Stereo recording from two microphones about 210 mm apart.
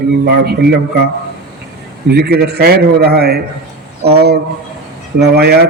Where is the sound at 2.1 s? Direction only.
50° right (ahead or behind).